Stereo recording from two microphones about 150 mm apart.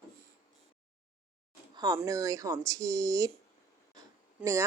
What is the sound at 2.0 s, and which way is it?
A man's voice, 20° right (ahead or behind).